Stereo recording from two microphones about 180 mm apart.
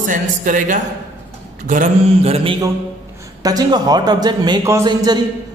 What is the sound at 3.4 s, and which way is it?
A man's voice, 20° right (ahead or behind).